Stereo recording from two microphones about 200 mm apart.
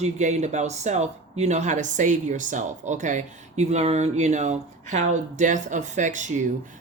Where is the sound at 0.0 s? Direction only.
35° right (ahead or behind).